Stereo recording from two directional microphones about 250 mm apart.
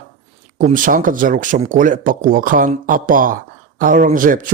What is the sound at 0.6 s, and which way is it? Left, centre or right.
Speech, right.